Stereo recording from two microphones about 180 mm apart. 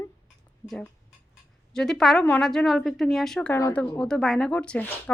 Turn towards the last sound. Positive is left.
turn(degrees=10)  # may be behind; listen again after turning